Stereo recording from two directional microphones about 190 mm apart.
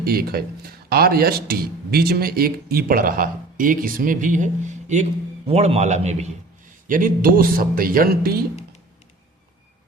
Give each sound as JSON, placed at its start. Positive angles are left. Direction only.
{"t": 0.0, "sound": "a man's voice", "side_deg": -50}
{"t": 6.8, "sound": "a man's voice", "side_deg": -45}